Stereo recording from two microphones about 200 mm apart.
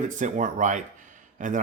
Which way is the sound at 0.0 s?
40° right (ahead or behind).